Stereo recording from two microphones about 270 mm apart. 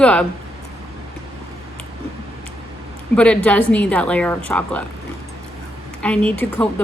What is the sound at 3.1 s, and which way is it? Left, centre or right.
A woman's voice, centre.